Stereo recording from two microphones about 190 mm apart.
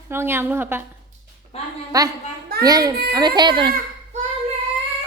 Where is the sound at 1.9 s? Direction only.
20° right (ahead or behind).